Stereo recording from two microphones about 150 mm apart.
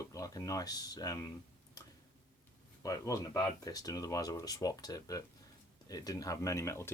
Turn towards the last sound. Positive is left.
turn(degrees=20)  # may be behind; listen again after turning